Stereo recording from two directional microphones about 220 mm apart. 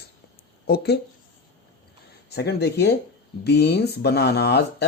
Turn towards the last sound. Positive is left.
turn(degrees=50)  # may be behind; listen again after turning